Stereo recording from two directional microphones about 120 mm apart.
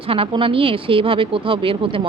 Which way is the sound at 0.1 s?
50° right (ahead or behind).